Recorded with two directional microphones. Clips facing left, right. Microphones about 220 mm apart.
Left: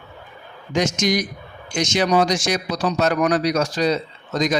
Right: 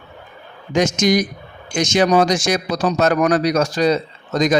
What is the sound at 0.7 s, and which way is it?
Speech, 45° right (ahead or behind).